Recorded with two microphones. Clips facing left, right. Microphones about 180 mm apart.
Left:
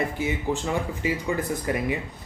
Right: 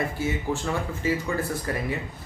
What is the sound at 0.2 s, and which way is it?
Speech, 15° left (ahead or behind).